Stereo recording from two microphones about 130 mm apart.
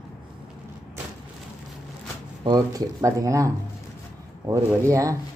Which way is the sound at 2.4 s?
30° right (ahead or behind).